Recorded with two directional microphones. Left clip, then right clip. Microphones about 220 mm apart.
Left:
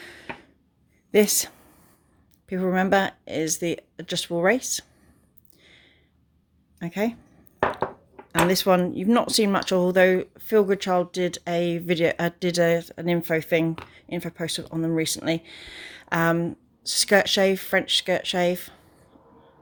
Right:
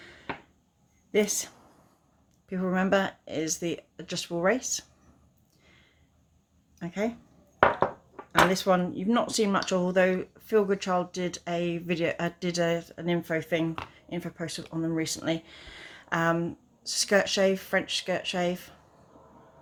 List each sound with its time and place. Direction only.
0.0 s a sound: 45° left (ahead or behind)
1.1 s speech: 45° left (ahead or behind)
6.7 s speech: 40° left (ahead or behind)
8.3 s speech: 40° left (ahead or behind)